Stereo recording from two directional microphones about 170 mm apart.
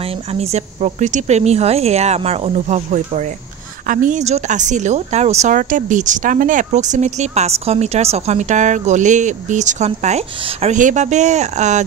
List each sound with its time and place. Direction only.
0.3 s a woman's voice: 40° right (ahead or behind)